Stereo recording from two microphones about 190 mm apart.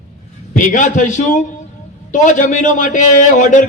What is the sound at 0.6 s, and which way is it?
A man's voice, 40° left (ahead or behind).